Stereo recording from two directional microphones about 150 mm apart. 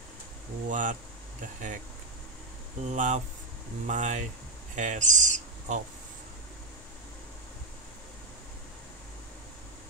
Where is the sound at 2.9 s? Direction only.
55° right (ahead or behind).